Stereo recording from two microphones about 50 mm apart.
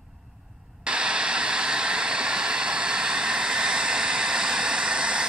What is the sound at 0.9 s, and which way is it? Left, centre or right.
Static, centre.